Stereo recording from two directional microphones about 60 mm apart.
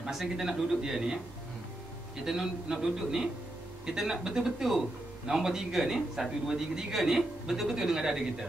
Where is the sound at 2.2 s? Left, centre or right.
Centre.